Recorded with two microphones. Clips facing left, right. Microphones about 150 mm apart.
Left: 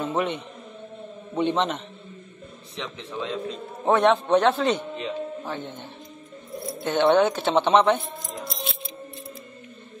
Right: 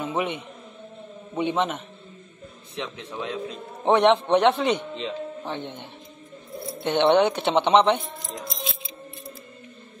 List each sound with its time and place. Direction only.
0.0 s a man's voice: 10° right (ahead or behind)
2.8 s a man's voice: 10° right (ahead or behind)
6.8 s speech: 25° right (ahead or behind)